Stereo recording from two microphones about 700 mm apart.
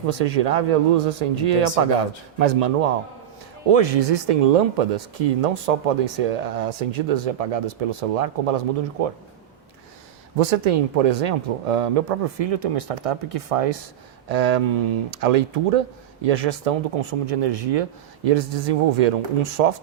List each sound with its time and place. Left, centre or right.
0.3 s speech: right
3.7 s speech: right
10.3 s speech: right